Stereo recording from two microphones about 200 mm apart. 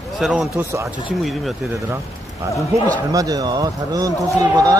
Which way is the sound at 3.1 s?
15° right (ahead or behind).